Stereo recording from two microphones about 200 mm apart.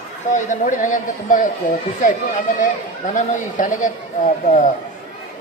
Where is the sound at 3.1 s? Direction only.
40° left (ahead or behind).